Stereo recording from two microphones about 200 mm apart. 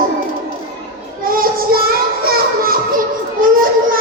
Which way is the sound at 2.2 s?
45° right (ahead or behind).